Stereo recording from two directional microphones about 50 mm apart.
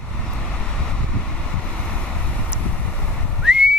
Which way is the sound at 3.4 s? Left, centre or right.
Centre.